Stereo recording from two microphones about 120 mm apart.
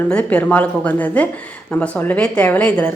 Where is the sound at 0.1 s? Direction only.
10° left (ahead or behind).